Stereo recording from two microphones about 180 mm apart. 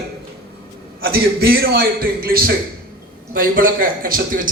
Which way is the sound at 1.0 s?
55° right (ahead or behind).